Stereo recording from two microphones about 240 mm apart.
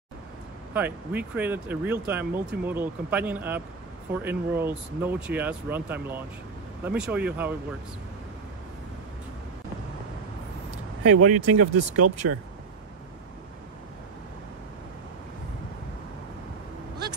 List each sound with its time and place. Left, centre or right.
0.7 s speech: centre
11.1 s speech: right